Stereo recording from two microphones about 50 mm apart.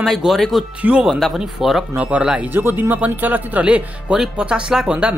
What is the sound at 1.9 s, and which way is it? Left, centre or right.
Speech, right.